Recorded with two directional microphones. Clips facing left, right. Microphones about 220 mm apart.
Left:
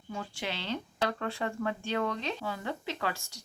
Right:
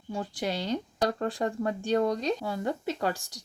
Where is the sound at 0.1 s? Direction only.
35° right (ahead or behind).